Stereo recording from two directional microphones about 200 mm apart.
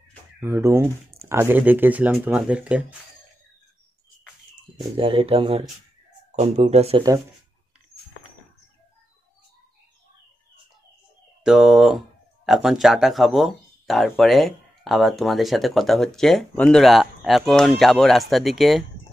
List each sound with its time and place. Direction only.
0.4 s speech: 10° right (ahead or behind)
4.9 s speech: 25° right (ahead or behind)
11.4 s speech: centre (ahead or behind)